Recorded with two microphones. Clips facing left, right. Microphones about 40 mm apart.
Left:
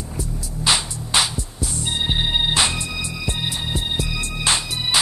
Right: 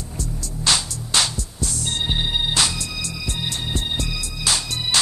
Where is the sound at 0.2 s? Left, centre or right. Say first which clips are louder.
Left 1 dB; centre.